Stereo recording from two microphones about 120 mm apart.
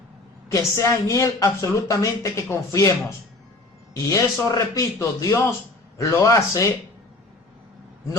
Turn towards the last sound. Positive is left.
turn(degrees=25)  # may be behind; listen again after turning